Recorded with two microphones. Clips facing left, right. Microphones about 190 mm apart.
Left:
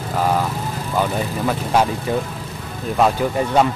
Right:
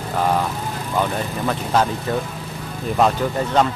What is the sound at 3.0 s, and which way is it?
Speech, 5° left (ahead or behind).